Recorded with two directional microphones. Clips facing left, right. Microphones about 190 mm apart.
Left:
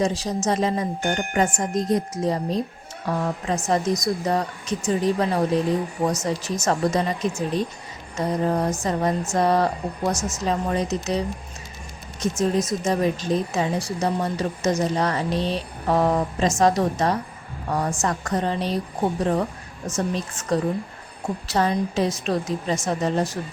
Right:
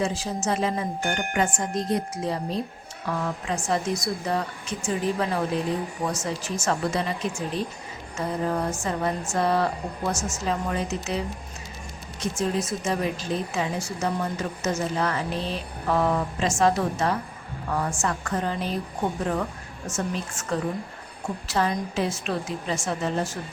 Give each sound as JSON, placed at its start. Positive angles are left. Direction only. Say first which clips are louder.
{"t": 0.0, "sound": "a woman's voice", "louder": "left 4 dB", "side_deg": 40}
{"t": 12.4, "sound": "a woman's voice", "louder": "left 4 dB", "side_deg": 40}